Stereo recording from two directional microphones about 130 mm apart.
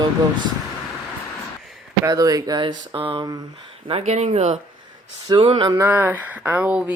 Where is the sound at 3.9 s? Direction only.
55° right (ahead or behind).